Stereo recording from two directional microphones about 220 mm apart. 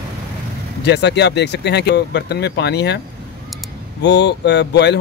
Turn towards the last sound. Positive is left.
turn(degrees=50)  # may be behind; listen again after turning